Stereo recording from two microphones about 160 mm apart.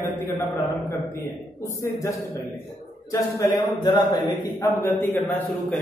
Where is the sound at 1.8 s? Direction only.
20° left (ahead or behind).